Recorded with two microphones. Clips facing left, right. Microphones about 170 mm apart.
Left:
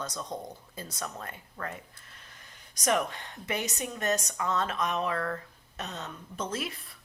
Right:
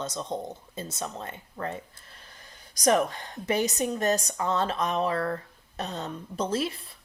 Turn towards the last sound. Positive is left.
turn(degrees=-30)  # may be behind; listen again after turning